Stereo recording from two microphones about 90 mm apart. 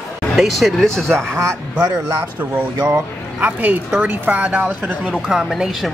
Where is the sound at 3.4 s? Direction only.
20° right (ahead or behind).